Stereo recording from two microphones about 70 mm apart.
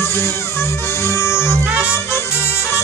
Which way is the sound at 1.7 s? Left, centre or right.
Centre.